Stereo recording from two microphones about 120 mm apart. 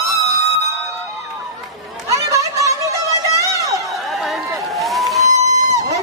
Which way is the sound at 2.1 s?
25° right (ahead or behind).